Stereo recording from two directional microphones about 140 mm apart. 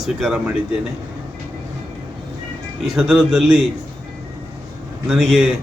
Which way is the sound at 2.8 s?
5° right (ahead or behind).